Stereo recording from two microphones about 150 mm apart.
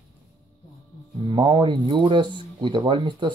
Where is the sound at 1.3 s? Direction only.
35° right (ahead or behind).